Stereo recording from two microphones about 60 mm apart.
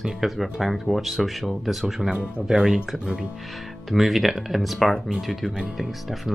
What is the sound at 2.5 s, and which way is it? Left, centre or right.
Speech, centre.